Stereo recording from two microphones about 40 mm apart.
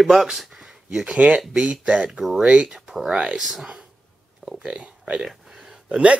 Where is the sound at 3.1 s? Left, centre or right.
Right.